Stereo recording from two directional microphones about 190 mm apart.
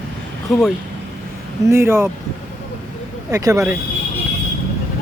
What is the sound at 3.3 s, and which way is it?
Speech, 15° right (ahead or behind).